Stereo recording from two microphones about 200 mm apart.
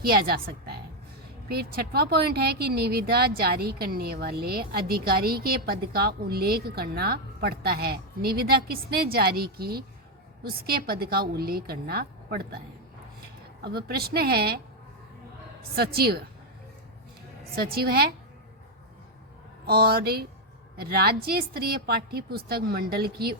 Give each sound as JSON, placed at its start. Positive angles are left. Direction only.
{"t": 0.0, "sound": "a woman's voice", "side_deg": -50}
{"t": 13.6, "sound": "speech", "side_deg": -50}
{"t": 15.7, "sound": "speech", "side_deg": -50}
{"t": 17.5, "sound": "speech", "side_deg": -50}
{"t": 19.6, "sound": "speech", "side_deg": -50}